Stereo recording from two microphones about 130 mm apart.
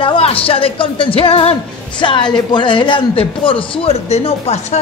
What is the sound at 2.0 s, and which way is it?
Speech, 35° left (ahead or behind).